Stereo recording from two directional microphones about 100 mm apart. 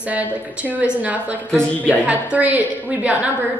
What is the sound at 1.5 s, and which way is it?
Speech, 10° left (ahead or behind).